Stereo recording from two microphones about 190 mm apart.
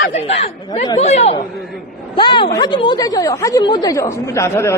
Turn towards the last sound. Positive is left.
turn(degrees=15)  # may be behind; listen again after turning